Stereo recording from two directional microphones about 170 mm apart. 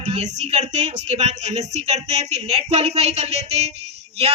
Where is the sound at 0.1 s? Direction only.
40° right (ahead or behind).